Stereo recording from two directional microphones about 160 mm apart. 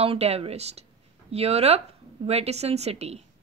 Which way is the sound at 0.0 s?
40° right (ahead or behind).